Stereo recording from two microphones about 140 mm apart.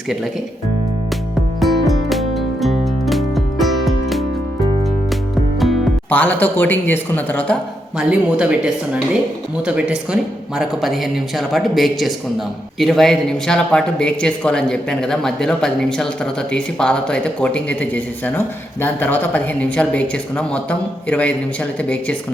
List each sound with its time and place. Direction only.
1.5 s music: centre (ahead or behind)
6.1 s speech: 10° left (ahead or behind)
7.9 s speech: 5° right (ahead or behind); by 22.1 s 10° left (ahead or behind)